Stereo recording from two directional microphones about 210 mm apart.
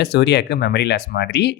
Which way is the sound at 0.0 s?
55° left (ahead or behind).